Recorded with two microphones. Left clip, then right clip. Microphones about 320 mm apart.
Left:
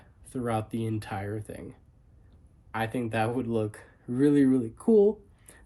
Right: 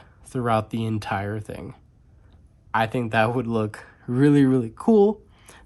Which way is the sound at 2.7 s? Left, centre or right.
Centre.